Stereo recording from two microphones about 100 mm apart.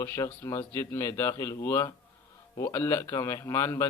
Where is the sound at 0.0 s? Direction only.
25° left (ahead or behind).